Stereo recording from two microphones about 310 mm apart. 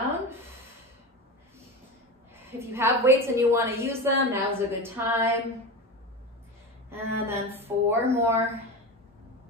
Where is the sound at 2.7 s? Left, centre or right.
Centre.